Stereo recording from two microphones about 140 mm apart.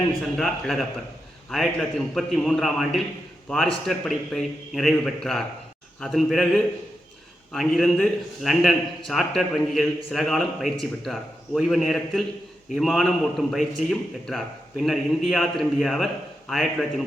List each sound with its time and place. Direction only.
0.3 s a man's voice: centre (ahead or behind)